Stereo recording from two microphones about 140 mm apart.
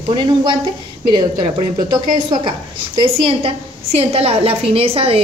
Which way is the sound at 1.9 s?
35° right (ahead or behind).